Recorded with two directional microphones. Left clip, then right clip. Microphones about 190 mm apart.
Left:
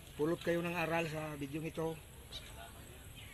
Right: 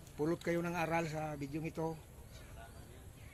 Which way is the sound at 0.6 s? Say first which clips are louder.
Even; 10° right (ahead or behind).